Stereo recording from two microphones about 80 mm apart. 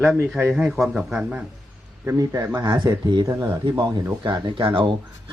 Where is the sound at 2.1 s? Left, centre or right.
Right.